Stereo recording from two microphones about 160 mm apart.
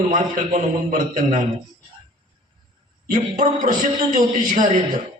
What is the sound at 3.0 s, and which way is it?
A man's voice, 60° right (ahead or behind).